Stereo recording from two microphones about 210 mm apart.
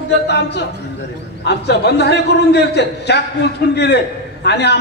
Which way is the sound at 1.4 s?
55° left (ahead or behind).